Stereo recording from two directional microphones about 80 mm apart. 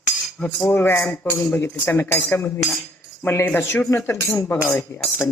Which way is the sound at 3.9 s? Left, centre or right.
Left.